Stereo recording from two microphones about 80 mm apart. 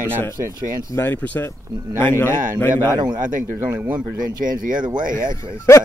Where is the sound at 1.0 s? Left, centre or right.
Left.